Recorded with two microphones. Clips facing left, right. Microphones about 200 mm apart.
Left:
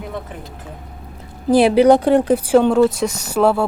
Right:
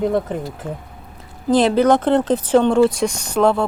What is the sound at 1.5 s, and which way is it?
Speech, 10° left (ahead or behind).